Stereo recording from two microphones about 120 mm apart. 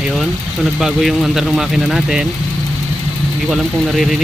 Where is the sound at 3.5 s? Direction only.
Centre (ahead or behind).